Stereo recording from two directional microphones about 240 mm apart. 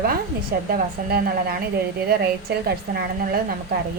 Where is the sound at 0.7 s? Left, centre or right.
Right.